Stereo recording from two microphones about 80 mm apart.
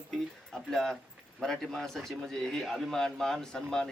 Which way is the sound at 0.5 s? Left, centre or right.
Centre.